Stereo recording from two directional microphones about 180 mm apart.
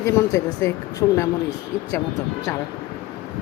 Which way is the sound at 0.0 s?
20° left (ahead or behind).